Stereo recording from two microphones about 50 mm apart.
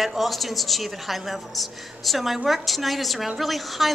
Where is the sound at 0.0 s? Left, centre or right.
Centre.